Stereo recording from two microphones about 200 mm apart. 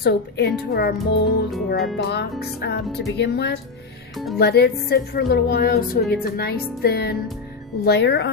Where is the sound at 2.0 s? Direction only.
55° left (ahead or behind).